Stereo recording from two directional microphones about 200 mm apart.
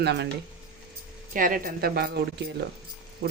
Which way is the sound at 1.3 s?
45° right (ahead or behind).